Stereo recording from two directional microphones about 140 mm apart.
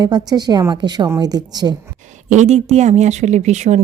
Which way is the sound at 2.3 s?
55° right (ahead or behind).